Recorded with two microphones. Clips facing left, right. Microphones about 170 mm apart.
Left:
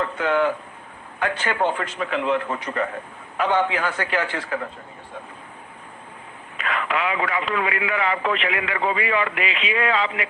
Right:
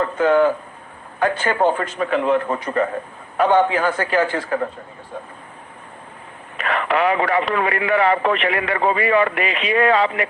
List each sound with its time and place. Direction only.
0.0 s a man's voice: 40° right (ahead or behind)
6.6 s a man's voice: 45° right (ahead or behind)